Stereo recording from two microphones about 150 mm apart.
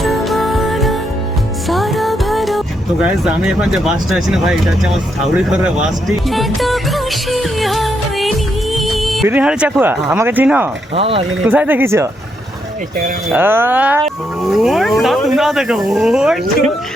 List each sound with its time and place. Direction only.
0.0 s music: centre (ahead or behind)
1.7 s speech: centre (ahead or behind)
6.2 s music: centre (ahead or behind)
9.3 s speech: 5° right (ahead or behind)
10.9 s speech: 40° right (ahead or behind)
11.4 s speech: 10° right (ahead or behind)
13.3 s speech: 15° right (ahead or behind)